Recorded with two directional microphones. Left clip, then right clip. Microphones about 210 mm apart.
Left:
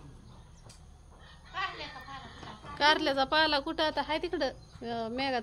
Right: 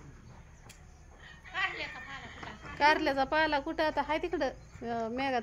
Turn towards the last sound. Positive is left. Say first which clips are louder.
# even
turn(degrees=-5)  # may be behind; listen again after turning